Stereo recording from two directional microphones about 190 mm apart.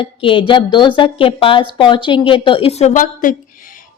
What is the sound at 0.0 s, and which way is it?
A woman's voice, 25° left (ahead or behind).